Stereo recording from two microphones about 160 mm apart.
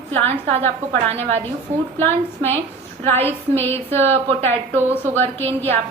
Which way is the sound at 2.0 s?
15° left (ahead or behind).